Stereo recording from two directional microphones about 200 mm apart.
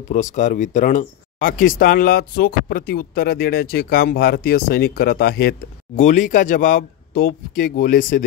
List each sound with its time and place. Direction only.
0.1 s speech: 40° left (ahead or behind)